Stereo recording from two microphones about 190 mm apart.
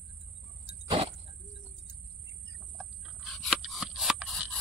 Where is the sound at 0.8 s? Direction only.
30° right (ahead or behind).